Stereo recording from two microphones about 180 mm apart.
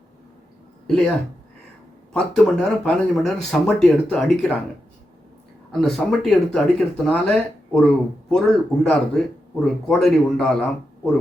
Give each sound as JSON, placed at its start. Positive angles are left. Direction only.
{"t": 0.9, "sound": "speech", "side_deg": 5}
{"t": 2.1, "sound": "speech", "side_deg": 5}
{"t": 5.8, "sound": "speech", "side_deg": 0}